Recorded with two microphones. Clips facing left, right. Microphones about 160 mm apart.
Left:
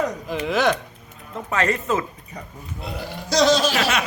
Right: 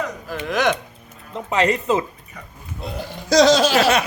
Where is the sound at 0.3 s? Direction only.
10° left (ahead or behind).